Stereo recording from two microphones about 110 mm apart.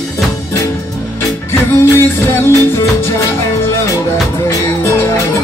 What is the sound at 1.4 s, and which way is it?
Music, 25° left (ahead or behind).